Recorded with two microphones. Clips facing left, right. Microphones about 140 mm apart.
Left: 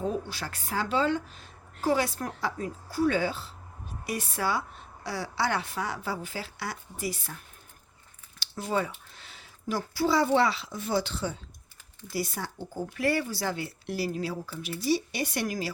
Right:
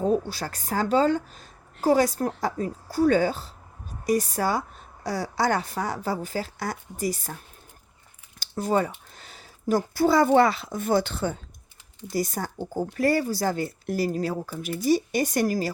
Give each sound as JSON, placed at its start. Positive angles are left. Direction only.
{"t": 0.0, "sound": "a woman's voice", "side_deg": -35}
{"t": 8.4, "sound": "speech", "side_deg": -45}